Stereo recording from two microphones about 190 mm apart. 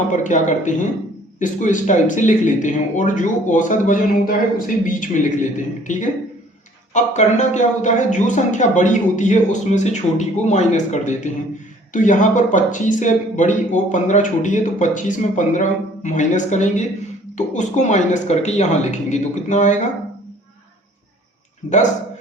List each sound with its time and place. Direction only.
0.1 s speech: 40° left (ahead or behind)